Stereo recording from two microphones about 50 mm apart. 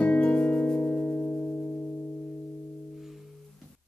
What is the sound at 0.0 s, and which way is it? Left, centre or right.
Music, left.